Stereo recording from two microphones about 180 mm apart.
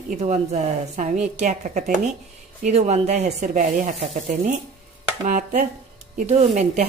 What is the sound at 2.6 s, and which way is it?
Sizzle, 40° right (ahead or behind).